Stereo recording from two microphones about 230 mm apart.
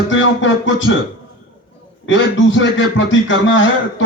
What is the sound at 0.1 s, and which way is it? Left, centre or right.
Speech, left.